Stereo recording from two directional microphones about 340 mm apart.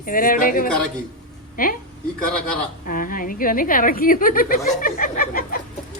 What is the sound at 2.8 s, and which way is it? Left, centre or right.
A woman's voice, left.